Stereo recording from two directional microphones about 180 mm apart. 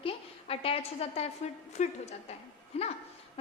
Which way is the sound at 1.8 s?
40° left (ahead or behind).